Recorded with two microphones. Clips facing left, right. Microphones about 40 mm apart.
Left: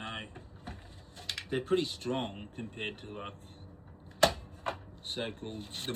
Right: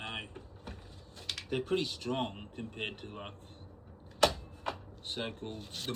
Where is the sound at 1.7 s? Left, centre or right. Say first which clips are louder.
Left 4 dB; left.